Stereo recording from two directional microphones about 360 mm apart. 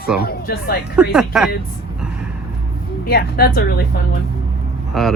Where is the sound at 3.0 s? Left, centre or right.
Left.